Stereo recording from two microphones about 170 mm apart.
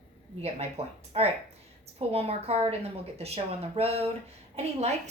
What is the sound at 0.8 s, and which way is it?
Speech, 35° right (ahead or behind).